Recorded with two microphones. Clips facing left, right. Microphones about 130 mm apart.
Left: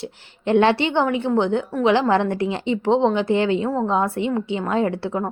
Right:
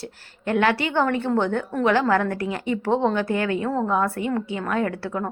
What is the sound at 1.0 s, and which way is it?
A woman's voice, 10° left (ahead or behind).